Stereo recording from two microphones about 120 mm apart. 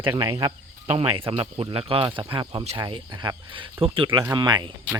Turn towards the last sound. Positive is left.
turn(degrees=-35)  # may be behind; listen again after turning